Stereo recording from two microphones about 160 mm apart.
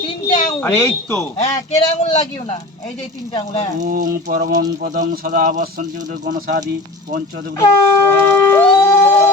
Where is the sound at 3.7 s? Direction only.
60° right (ahead or behind).